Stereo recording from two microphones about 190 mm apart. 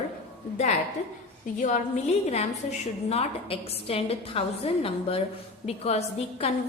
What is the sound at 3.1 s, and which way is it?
A woman's voice, 30° left (ahead or behind).